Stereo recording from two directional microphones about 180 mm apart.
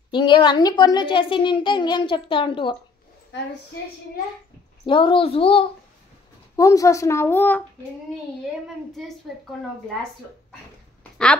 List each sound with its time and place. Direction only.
0.1 s a child's voice: 25° left (ahead or behind)
4.8 s a child's voice: 30° left (ahead or behind)
6.5 s a woman's voice: 20° left (ahead or behind)
9.0 s a woman's voice: centre (ahead or behind)